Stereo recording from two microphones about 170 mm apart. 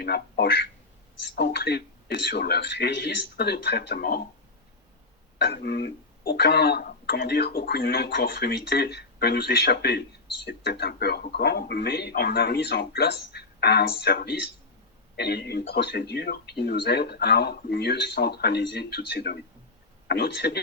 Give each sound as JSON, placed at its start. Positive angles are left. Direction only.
{"t": 0.0, "sound": "speech", "side_deg": 70}
{"t": 5.4, "sound": "speech", "side_deg": 75}